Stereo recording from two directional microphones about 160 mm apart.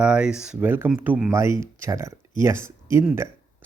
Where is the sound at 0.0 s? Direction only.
5° right (ahead or behind).